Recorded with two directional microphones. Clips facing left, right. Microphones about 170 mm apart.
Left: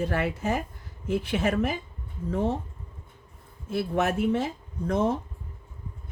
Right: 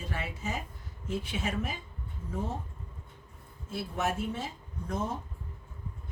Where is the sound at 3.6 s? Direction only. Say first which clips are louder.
Left 7 dB; 70° left (ahead or behind).